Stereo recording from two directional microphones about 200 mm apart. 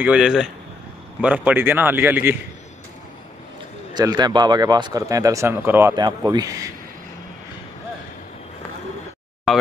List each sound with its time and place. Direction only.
0.0 s speech: 5° right (ahead or behind)
3.9 s speech: 20° right (ahead or behind)
9.5 s speech: centre (ahead or behind)